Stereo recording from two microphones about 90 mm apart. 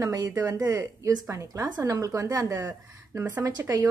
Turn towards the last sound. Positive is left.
turn(degrees=-45)  # may be behind; listen again after turning